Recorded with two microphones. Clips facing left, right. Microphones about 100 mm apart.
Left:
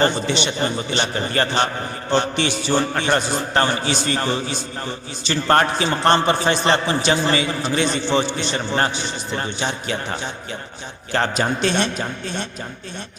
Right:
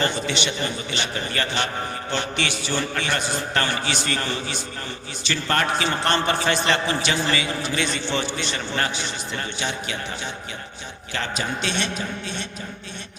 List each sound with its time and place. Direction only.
0.0 s a man's voice: 35° left (ahead or behind)